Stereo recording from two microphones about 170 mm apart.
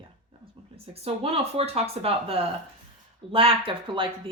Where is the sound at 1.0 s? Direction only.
35° right (ahead or behind).